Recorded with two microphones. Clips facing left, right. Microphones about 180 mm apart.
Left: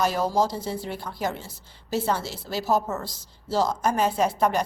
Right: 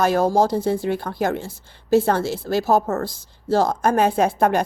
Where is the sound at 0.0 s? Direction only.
50° right (ahead or behind).